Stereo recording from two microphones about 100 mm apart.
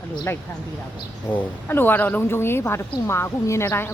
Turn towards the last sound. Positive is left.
turn(degrees=25)  # may be behind; listen again after turning